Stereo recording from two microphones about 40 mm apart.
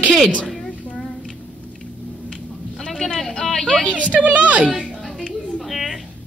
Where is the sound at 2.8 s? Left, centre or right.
Centre.